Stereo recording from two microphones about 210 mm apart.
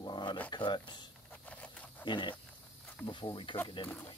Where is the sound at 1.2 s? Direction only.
5° left (ahead or behind).